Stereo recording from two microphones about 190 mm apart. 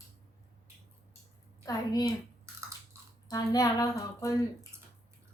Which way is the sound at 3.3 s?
20° left (ahead or behind).